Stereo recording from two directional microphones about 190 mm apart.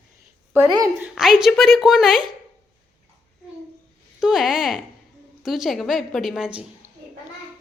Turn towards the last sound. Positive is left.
turn(degrees=-5)  # may be behind; listen again after turning